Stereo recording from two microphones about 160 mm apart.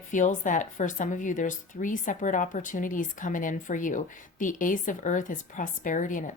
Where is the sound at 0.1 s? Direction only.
50° left (ahead or behind).